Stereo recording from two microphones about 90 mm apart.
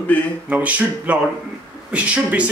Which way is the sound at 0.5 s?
15° right (ahead or behind).